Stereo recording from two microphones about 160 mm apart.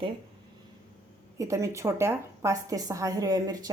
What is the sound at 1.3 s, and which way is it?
A woman's voice, 20° right (ahead or behind).